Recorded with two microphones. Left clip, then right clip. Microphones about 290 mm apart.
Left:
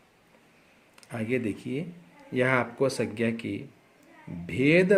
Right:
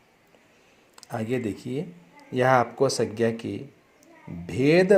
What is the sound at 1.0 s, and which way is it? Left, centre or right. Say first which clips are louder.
Speech: right 1 dB; centre.